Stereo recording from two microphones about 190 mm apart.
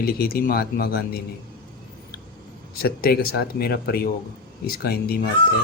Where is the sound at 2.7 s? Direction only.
50° left (ahead or behind).